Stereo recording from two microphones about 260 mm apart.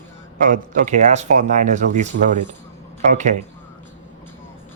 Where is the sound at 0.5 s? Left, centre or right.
Right.